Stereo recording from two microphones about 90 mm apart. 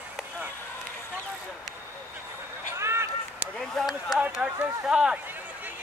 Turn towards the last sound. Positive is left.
turn(degrees=-10)  # may be behind; listen again after turning